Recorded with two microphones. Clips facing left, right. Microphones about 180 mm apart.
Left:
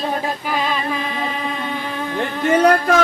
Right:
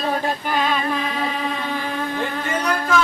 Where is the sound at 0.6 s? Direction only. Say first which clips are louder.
Right 2 dB; centre (ahead or behind).